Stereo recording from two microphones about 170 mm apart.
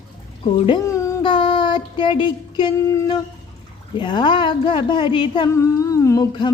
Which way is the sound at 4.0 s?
30° left (ahead or behind).